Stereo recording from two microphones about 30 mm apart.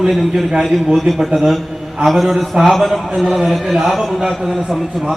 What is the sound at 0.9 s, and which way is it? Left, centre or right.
A man's voice, centre.